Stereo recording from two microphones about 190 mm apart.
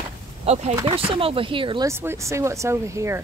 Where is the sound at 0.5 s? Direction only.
35° right (ahead or behind).